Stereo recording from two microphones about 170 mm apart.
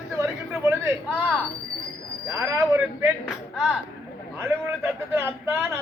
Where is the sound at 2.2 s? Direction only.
20° right (ahead or behind).